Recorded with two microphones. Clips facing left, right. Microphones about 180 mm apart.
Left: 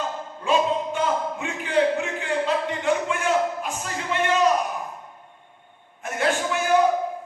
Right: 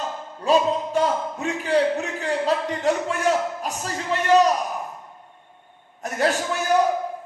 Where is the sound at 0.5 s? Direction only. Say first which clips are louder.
Right 3 dB; 40° right (ahead or behind).